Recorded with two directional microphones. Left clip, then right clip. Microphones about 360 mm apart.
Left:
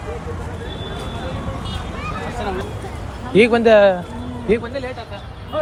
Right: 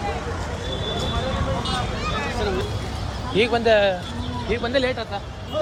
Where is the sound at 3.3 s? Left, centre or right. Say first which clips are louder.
Left 6 dB; centre.